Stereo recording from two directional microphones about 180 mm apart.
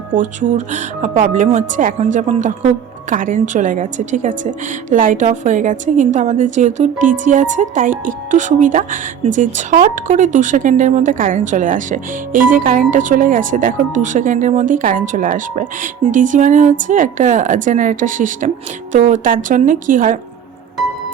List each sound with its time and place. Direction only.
0.2 s speech: 45° right (ahead or behind)